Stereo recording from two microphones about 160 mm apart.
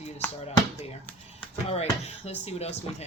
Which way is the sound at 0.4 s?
40° left (ahead or behind).